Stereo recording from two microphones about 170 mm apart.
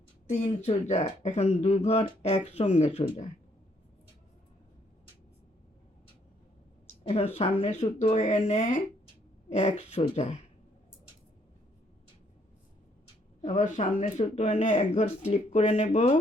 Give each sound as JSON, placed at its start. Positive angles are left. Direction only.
{"t": 0.3, "sound": "speech", "side_deg": 45}
{"t": 7.1, "sound": "speech", "side_deg": 35}
{"t": 13.4, "sound": "speech", "side_deg": 45}